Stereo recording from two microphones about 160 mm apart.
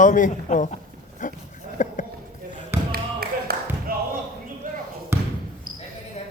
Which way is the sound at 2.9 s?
70° right (ahead or behind).